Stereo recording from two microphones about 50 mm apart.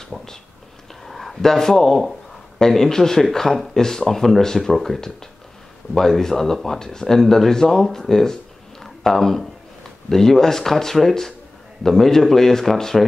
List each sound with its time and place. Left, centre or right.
0.0 s speech: centre